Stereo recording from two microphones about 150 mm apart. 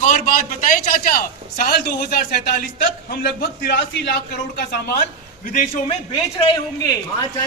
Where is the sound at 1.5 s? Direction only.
85° left.